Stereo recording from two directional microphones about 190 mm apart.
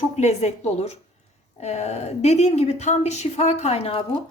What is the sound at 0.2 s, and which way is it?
A woman's voice, 35° left (ahead or behind).